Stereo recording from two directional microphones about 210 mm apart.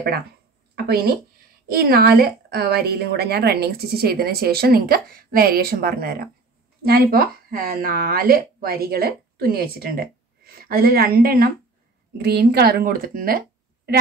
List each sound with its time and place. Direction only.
0.7 s a woman's voice: 45° right (ahead or behind)